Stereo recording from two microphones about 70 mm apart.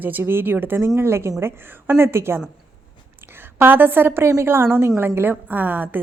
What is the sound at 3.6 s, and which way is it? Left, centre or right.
A woman's voice, right.